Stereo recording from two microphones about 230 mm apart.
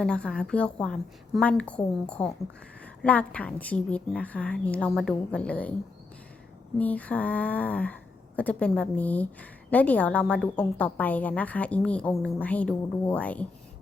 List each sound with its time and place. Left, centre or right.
0.0 s a woman's voice: centre
6.7 s a woman's voice: centre